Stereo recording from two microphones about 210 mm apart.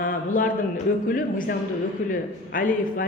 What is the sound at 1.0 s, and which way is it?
A man's voice, 40° left (ahead or behind).